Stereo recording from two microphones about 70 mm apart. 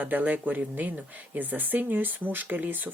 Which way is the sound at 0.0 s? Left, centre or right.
Right.